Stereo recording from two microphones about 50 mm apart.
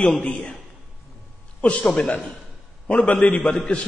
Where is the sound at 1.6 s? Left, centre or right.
Left.